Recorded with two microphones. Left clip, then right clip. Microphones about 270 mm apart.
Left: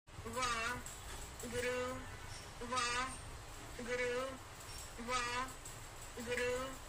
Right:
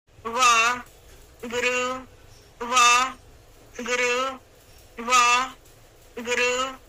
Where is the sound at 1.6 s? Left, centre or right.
Right.